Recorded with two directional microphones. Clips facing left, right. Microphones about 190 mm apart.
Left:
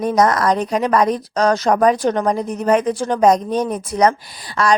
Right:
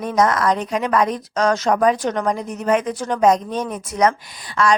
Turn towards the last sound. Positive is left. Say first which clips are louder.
# even
turn(degrees=40)  # may be behind; listen again after turning